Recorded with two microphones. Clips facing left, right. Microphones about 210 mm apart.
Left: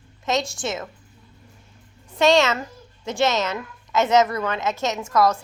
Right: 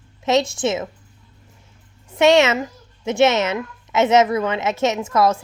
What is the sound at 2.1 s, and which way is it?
Speech, 25° right (ahead or behind).